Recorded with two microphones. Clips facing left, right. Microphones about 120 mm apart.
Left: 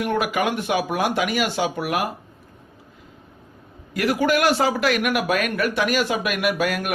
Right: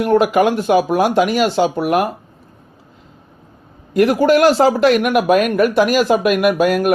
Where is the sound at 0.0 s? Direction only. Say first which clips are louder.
Right 9 dB; 40° right (ahead or behind).